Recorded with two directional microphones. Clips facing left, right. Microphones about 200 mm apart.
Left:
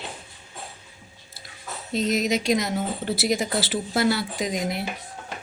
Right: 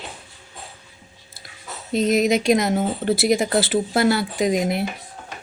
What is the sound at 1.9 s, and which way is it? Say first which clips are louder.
A woman's voice: right 5 dB; 55° right (ahead or behind).